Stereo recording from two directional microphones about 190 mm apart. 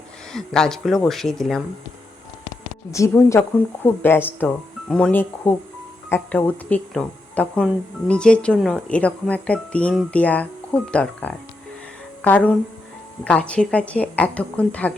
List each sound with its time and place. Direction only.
0.3 s speech: 5° left (ahead or behind)
2.9 s speech: 15° left (ahead or behind)